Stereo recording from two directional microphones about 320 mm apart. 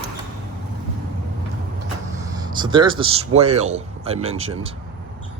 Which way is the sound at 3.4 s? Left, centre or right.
Centre.